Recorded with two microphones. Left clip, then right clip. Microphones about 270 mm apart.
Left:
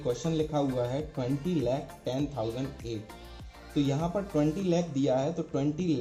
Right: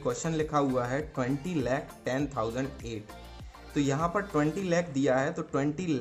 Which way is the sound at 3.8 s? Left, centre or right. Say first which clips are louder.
Right 2 dB; right.